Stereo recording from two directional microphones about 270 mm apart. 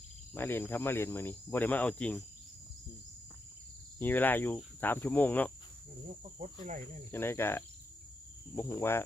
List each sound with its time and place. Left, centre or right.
0.3 s speech: centre
3.9 s speech: centre
6.4 s cricket: right
7.1 s speech: centre